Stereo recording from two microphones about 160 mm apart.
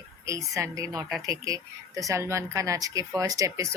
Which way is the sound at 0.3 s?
20° right (ahead or behind).